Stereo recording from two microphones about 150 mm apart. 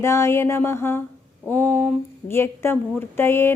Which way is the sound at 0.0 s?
20° left (ahead or behind).